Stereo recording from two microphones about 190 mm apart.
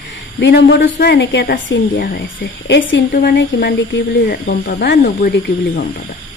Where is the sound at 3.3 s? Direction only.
60° left (ahead or behind).